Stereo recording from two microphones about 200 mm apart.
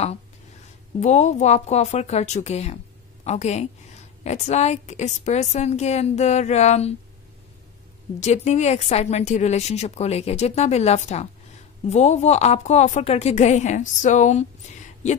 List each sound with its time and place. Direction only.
0.9 s a woman's voice: 35° left (ahead or behind)
8.2 s a woman's voice: 35° left (ahead or behind)